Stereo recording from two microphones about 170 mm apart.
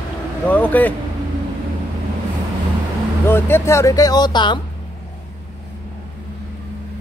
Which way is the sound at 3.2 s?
15° left (ahead or behind).